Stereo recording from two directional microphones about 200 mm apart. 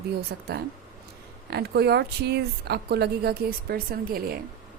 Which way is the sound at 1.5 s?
55° right (ahead or behind).